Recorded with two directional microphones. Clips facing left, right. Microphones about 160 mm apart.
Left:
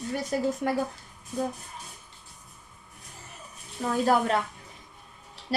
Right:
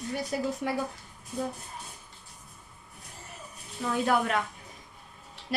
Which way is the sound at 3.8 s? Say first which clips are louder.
Left 3 dB; 35° left (ahead or behind).